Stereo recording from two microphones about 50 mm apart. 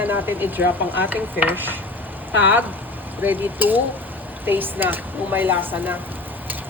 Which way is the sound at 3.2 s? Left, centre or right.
Right.